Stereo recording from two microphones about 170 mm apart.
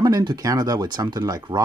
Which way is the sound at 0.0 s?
25° right (ahead or behind).